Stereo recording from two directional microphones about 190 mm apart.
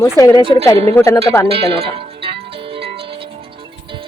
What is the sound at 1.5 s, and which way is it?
Music, 30° right (ahead or behind).